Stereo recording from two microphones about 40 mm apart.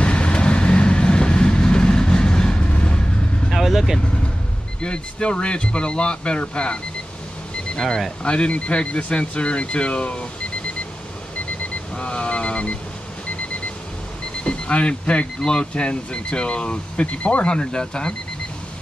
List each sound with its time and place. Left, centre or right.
0.0 s train: left
2.7 s vehicle: left
3.4 s vehicle: centre
4.8 s speech: left
8.2 s speech: left
12.0 s speech: left
14.4 s speech: left
17.5 s speech: left